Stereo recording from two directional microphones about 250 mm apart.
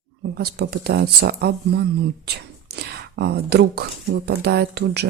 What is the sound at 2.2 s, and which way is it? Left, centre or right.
Whispering, right.